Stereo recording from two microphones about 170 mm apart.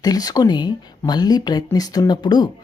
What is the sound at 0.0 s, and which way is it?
Speech, 20° left (ahead or behind).